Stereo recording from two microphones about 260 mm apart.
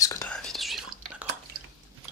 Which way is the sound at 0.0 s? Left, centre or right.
Centre.